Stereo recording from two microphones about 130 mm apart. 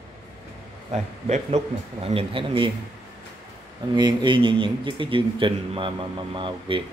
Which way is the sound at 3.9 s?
35° right (ahead or behind).